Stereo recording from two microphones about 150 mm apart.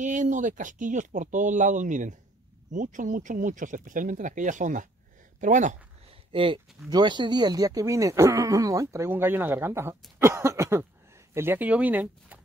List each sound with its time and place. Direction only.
0.0 s speech: 55° right (ahead or behind)
6.3 s speech: 35° right (ahead or behind); by 12.4 s 10° right (ahead or behind)